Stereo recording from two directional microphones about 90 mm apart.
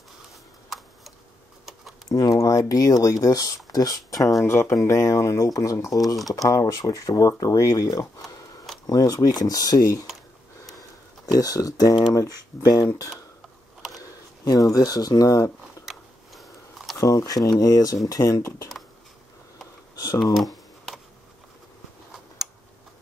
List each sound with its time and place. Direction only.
2.0 s speech: 35° left (ahead or behind)
4.5 s speech: 25° left (ahead or behind)
4.7 s speech: 35° left (ahead or behind)
15.8 s biting: centre (ahead or behind)
17.0 s speech: 40° left (ahead or behind)
20.3 s computer keyboard: centre (ahead or behind)
22.4 s tick: centre (ahead or behind)